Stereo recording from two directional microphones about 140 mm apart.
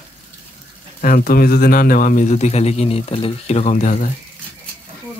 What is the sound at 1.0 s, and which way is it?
Speech, 90° left.